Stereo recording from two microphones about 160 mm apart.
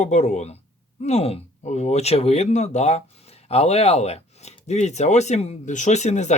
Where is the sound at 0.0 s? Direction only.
45° left (ahead or behind).